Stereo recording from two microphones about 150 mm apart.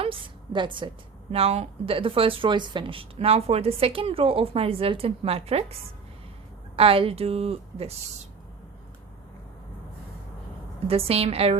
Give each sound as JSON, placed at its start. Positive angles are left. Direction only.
{"t": 0.0, "sound": "a sound", "side_deg": -35}
{"t": 1.3, "sound": "speech", "side_deg": -40}
{"t": 6.7, "sound": "speech", "side_deg": -40}
{"t": 10.8, "sound": "speech", "side_deg": -40}